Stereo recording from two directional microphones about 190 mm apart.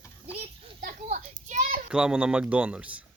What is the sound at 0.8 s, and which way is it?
Children playing, 40° right (ahead or behind).